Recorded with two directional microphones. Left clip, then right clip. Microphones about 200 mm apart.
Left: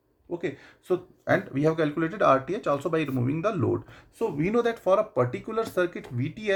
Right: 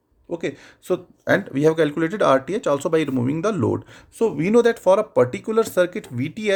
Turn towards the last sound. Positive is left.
turn(degrees=-55)  # may be behind; listen again after turning